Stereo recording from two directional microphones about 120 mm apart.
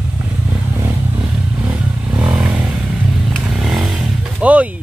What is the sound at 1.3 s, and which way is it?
Motorcycle, 10° right (ahead or behind).